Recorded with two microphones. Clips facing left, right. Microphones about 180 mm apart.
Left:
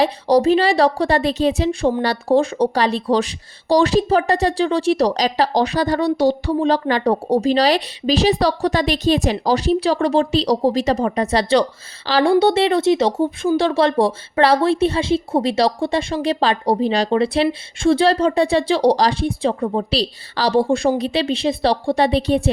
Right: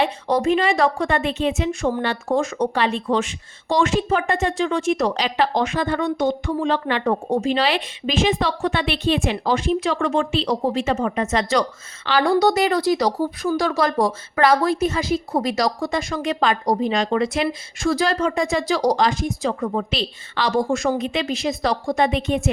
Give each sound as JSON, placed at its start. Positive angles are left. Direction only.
{"t": 0.0, "sound": "speech", "side_deg": 35}